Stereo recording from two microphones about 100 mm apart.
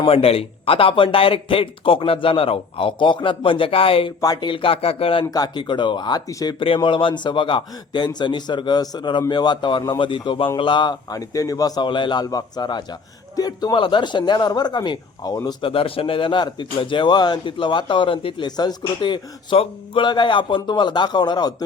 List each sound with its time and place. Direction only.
0.0 s speech: 70° left (ahead or behind)
4.2 s speech: 45° left (ahead or behind); by 5.2 s 75° left (ahead or behind)
5.2 s a man's voice: 40° left (ahead or behind)
6.7 s a man's voice: 60° left (ahead or behind)
11.1 s a man's voice: 35° left (ahead or behind)
15.6 s speech: 65° left (ahead or behind)
18.4 s a man's voice: 45° left (ahead or behind)